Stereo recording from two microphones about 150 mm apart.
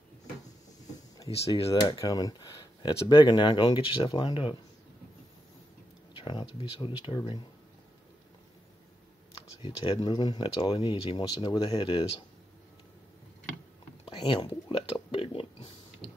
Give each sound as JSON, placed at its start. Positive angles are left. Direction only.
{"t": 1.7, "sound": "speech", "side_deg": 25}
{"t": 6.2, "sound": "speech", "side_deg": 30}
{"t": 9.6, "sound": "speech", "side_deg": 40}
{"t": 14.0, "sound": "a sound", "side_deg": 30}